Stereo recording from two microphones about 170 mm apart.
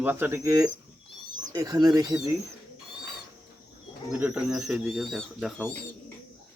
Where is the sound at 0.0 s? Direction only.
10° right (ahead or behind).